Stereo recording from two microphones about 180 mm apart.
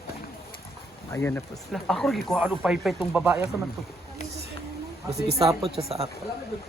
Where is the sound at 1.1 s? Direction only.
10° left (ahead or behind).